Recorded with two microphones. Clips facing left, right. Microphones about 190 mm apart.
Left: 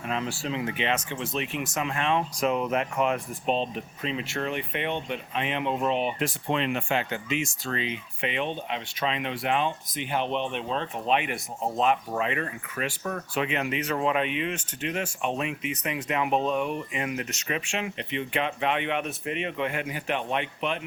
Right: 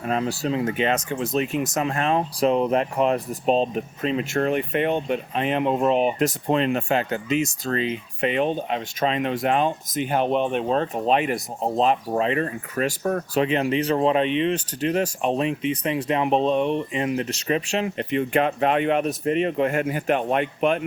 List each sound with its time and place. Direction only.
0.0 s speech: 40° right (ahead or behind)